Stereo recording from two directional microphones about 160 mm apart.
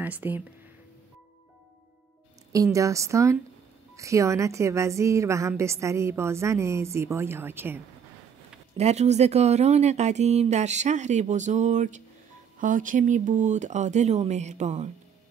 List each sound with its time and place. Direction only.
0.0 s speech: 10° right (ahead or behind)
2.5 s a woman's voice: 20° right (ahead or behind)
8.7 s speech: 45° right (ahead or behind)